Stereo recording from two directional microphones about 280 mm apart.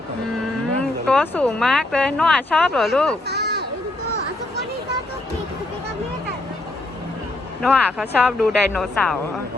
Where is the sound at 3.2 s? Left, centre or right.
Right.